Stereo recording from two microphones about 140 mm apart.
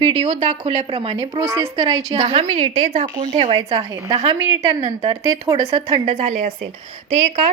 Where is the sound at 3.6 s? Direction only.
30° right (ahead or behind).